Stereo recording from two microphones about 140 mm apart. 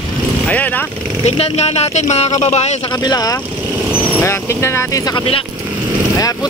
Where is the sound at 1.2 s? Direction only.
50° left (ahead or behind).